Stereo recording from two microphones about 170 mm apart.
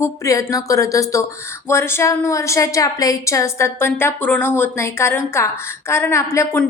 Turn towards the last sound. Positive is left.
turn(degrees=15)  # may be behind; listen again after turning